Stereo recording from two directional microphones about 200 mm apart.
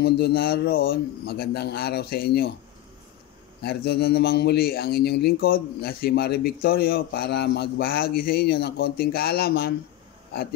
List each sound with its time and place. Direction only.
0.0 s speech: 50° left (ahead or behind)
3.6 s speech: 50° left (ahead or behind)